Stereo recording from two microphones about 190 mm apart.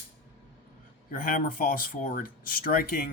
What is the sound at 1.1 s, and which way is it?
Speech, 45° left (ahead or behind).